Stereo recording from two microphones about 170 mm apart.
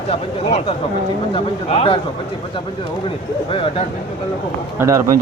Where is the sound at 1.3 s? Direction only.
35° left (ahead or behind).